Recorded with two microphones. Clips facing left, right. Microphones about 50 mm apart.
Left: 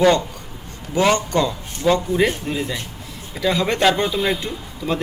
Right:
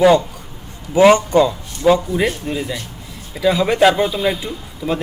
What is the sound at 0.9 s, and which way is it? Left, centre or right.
A man's voice, centre.